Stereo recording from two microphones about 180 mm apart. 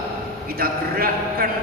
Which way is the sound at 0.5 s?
55° right (ahead or behind).